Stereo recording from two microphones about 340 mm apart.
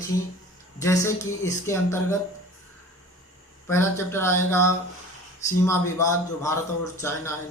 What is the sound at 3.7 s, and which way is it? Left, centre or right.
Speech, centre.